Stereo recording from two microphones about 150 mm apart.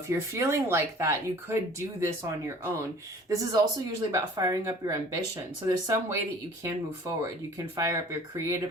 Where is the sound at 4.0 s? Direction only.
25° right (ahead or behind).